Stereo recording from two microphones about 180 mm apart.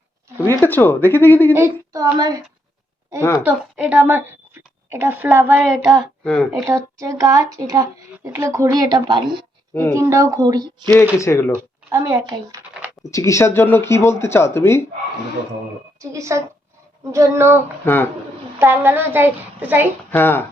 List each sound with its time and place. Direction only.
0.4 s speech: 10° left (ahead or behind)
1.5 s a child's voice: 15° right (ahead or behind)
3.4 s a woman's voice: 10° right (ahead or behind)
5.5 s child singing: centre (ahead or behind)
6.5 s speech: 15° right (ahead or behind)
9.9 s a child's voice: 15° right (ahead or behind)
11.2 s speech: 15° left (ahead or behind)
11.5 s speech: 15° right (ahead or behind)
13.0 s speech: 15° left (ahead or behind)
16.0 s a child's voice: 15° right (ahead or behind)
17.8 s speech: 10° left (ahead or behind)
18.6 s a child's voice: 10° right (ahead or behind)
20.1 s speech: 10° left (ahead or behind)